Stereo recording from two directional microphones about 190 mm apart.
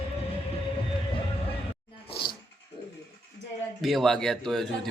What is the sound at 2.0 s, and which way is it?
Dog, 25° left (ahead or behind).